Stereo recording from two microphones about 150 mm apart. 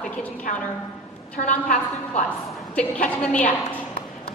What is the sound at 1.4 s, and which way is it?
Speech, 55° left (ahead or behind).